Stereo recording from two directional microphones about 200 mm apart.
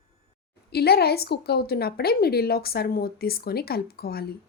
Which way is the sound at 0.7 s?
50° left (ahead or behind).